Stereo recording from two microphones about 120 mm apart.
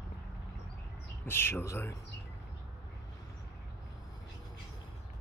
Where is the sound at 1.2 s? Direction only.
20° left (ahead or behind).